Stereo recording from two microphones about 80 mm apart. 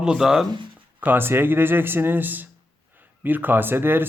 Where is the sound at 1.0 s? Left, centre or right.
Right.